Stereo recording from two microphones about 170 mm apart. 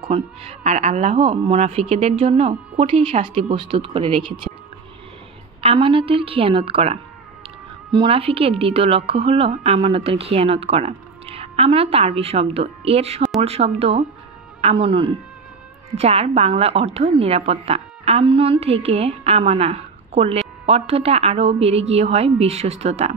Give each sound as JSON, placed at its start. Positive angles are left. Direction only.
{"t": 0.0, "sound": "a woman's voice", "side_deg": -35}
{"t": 5.6, "sound": "a woman's voice", "side_deg": -30}